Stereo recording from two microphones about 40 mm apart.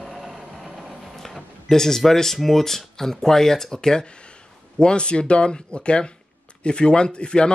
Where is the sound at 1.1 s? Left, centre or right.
Centre.